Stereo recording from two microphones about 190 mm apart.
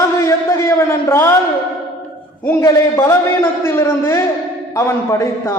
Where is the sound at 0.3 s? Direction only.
15° left (ahead or behind).